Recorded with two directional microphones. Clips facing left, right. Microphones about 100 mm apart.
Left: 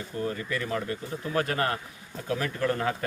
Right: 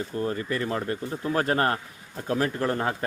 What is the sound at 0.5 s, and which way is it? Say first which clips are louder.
A man's voice: right 3 dB; 35° right (ahead or behind).